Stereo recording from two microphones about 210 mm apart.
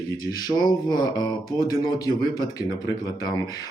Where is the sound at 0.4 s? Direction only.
20° left (ahead or behind).